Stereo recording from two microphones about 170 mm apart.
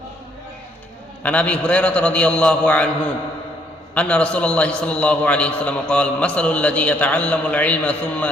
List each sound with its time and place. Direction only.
1.2 s a man's voice: 10° left (ahead or behind)
3.9 s a man's voice: 5° left (ahead or behind)